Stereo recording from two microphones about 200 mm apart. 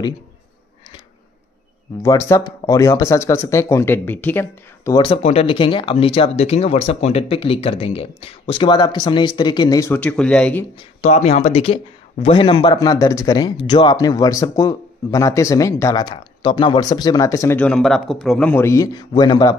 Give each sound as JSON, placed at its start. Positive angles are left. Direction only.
{"t": 2.0, "sound": "speech", "side_deg": 15}
{"t": 11.0, "sound": "speech", "side_deg": 35}